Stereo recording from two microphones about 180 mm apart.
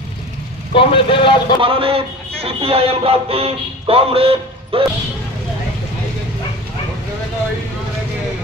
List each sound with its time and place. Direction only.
0.7 s a man's voice: 30° left (ahead or behind)
1.6 s speech: 30° right (ahead or behind)